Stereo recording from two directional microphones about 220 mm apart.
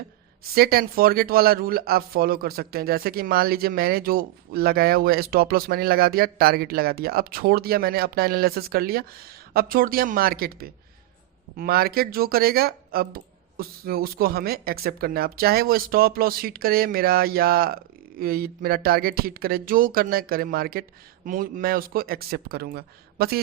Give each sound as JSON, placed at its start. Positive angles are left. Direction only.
{"t": 0.5, "sound": "speech", "side_deg": -45}